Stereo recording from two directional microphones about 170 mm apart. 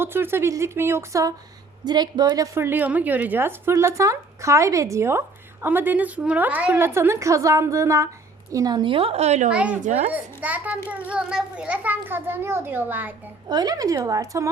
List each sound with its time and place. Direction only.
0.0 s a woman's voice: 15° right (ahead or behind); by 9.5 s 40° right (ahead or behind)
9.5 s a woman's voice: 5° right (ahead or behind)
9.8 s a child's voice: 45° right (ahead or behind)
10.1 s a woman's voice: 10° right (ahead or behind)
13.5 s speech: 25° right (ahead or behind)